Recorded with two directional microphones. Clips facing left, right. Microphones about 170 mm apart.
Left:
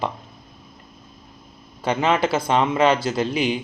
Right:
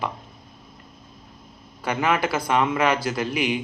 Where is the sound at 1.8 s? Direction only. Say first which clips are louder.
Left 3 dB; 25° left (ahead or behind).